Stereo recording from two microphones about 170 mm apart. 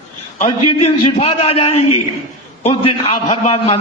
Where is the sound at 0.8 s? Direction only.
35° left (ahead or behind).